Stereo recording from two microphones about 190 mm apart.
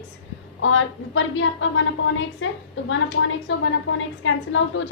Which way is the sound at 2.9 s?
75° left (ahead or behind).